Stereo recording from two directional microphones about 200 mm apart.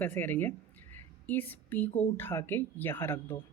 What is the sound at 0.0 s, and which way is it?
A woman's voice, 10° left (ahead or behind).